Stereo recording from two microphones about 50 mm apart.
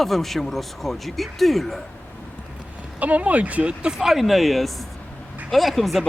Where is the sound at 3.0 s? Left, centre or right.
Right.